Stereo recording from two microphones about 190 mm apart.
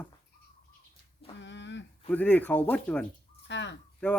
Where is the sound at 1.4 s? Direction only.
70° left (ahead or behind).